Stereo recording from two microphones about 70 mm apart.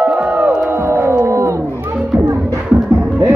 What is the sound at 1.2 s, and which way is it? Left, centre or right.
Crowd, right.